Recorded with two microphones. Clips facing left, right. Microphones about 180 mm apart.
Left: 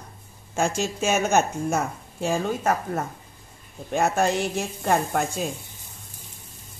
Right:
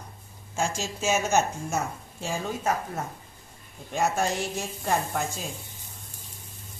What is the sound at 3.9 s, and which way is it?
A woman's voice, 60° left (ahead or behind).